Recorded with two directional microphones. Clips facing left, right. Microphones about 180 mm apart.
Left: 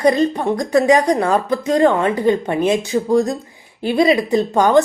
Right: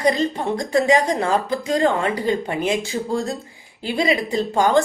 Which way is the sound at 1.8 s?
20° left (ahead or behind).